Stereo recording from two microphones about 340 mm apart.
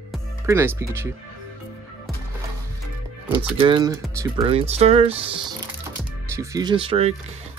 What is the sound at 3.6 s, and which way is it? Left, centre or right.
Speech, centre.